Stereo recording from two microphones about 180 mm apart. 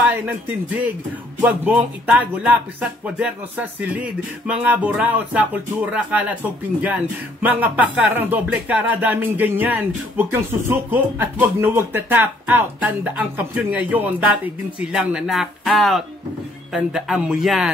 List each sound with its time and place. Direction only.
0.7 s speech: 10° right (ahead or behind)
7.4 s speech: 10° right (ahead or behind)